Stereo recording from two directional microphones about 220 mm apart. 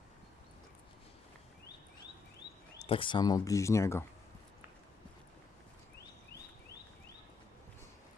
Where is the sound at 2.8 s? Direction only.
25° left (ahead or behind).